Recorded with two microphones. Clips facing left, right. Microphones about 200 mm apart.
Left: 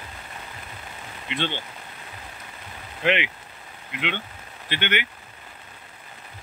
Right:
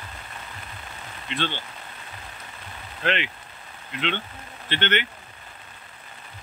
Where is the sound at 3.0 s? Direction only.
15° left (ahead or behind).